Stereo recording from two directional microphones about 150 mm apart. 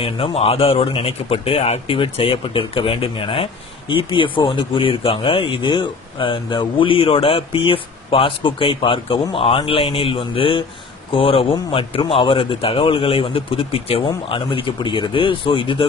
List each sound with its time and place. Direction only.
0.0 s speech: 40° left (ahead or behind)